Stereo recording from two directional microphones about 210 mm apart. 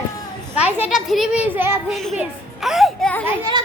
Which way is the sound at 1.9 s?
Centre (ahead or behind).